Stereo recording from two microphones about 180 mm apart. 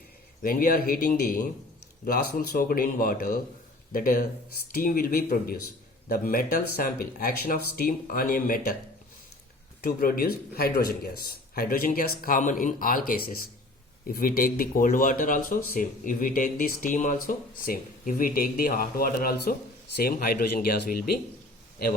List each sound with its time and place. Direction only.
0.4 s speech: 50° left (ahead or behind)
9.8 s speech: 55° left (ahead or behind)